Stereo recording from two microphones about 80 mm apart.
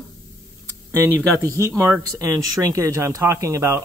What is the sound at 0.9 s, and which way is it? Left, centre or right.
Speech, right.